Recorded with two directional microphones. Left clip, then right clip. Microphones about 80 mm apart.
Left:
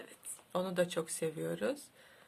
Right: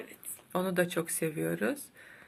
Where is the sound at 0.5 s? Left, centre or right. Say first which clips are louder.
Right 4 dB; left.